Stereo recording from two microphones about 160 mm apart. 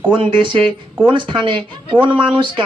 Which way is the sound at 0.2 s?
30° right (ahead or behind).